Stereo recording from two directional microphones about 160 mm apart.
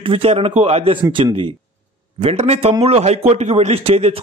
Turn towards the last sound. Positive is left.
turn(degrees=-40)  # may be behind; listen again after turning